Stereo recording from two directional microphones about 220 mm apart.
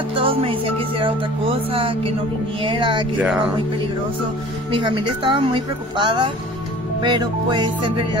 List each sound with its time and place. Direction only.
0.1 s music: 25° right (ahead or behind)
3.2 s speech: 5° right (ahead or behind)
4.6 s music: 20° right (ahead or behind)